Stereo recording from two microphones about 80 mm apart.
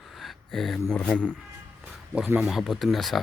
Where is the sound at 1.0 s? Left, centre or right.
Centre.